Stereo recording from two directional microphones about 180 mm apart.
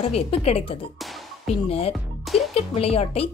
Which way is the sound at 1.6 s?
30° left (ahead or behind).